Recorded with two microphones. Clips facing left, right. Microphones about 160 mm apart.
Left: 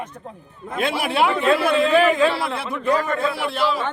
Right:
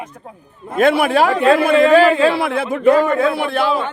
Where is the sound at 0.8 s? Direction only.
50° right (ahead or behind).